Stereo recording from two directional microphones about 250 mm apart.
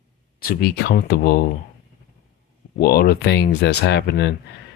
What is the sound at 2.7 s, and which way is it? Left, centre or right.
Speech, left.